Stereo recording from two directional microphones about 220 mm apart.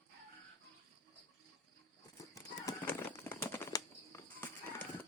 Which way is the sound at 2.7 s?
10° left (ahead or behind).